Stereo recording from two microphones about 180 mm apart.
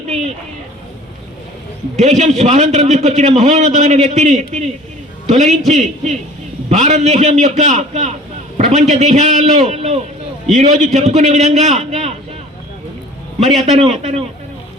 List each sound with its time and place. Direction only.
2.0 s a man's voice: 40° right (ahead or behind)
13.7 s a man's voice: 40° right (ahead or behind)